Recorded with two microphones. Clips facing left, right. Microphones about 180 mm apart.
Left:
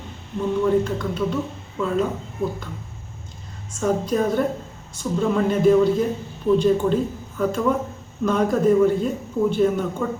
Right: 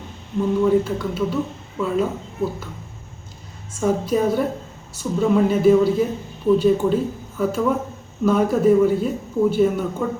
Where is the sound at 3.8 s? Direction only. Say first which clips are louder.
Right 1 dB; 5° right (ahead or behind).